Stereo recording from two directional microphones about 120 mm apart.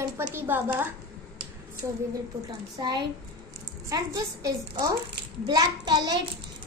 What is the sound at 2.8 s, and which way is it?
A child's voice, 35° right (ahead or behind).